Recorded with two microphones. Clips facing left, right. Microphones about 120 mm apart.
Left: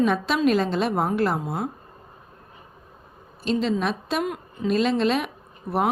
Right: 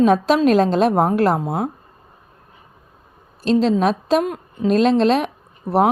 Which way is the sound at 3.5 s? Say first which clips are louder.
Right 7 dB; 35° right (ahead or behind).